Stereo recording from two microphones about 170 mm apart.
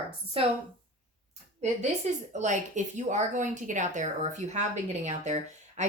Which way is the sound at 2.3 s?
45° right (ahead or behind).